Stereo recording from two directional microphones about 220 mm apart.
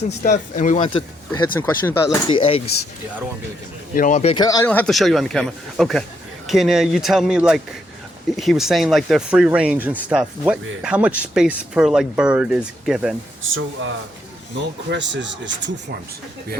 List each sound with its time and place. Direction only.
0.2 s speech: 35° left (ahead or behind)
0.8 s speech: 25° left (ahead or behind)
1.5 s speech: 10° left (ahead or behind)
2.2 s speech: 25° left (ahead or behind)
3.9 s speech: 35° left (ahead or behind)
4.4 s speech: 10° left (ahead or behind)
13.4 s speech: 60° right (ahead or behind)